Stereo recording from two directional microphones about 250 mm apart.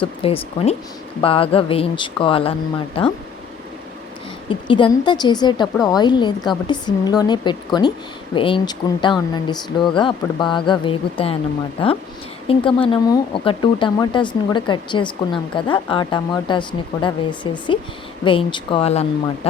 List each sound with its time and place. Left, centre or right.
0.0 s speech: left
4.4 s speech: centre
12.5 s speech: left